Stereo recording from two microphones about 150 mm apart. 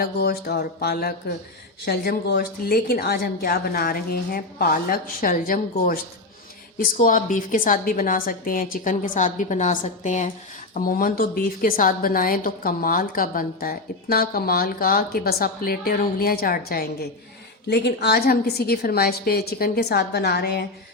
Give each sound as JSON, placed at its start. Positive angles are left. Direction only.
{"t": 0.0, "sound": "a woman's voice", "side_deg": 90}
{"t": 10.8, "sound": "a woman's voice", "side_deg": 70}